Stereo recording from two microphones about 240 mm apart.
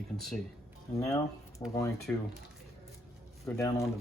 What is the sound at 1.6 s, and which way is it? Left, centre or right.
Speech, centre.